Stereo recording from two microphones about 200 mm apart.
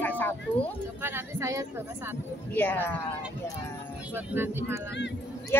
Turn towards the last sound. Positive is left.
turn(degrees=-10)  # may be behind; listen again after turning